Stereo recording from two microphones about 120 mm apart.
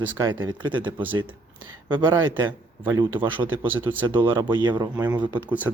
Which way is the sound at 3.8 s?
40° right (ahead or behind).